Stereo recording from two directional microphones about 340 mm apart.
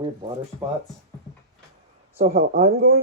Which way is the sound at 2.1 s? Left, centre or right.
Centre.